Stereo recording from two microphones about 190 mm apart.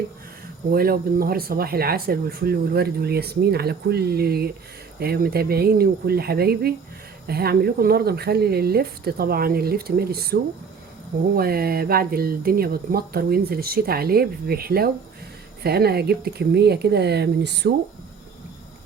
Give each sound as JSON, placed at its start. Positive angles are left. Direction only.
{"t": 0.7, "sound": "speech", "side_deg": -50}
{"t": 11.3, "sound": "speech", "side_deg": -55}